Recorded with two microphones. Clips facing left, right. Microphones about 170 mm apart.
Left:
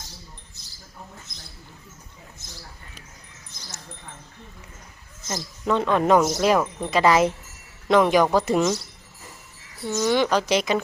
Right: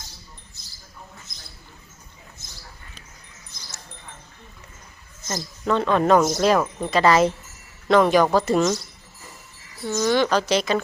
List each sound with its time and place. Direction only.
5.3 s speech: 10° left (ahead or behind)
6.9 s speech: 15° left (ahead or behind)
9.8 s speech: 10° left (ahead or behind)